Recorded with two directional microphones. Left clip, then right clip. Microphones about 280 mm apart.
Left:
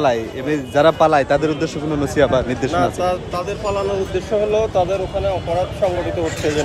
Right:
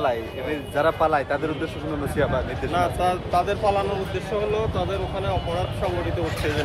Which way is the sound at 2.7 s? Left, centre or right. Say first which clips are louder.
Left 3 dB; centre.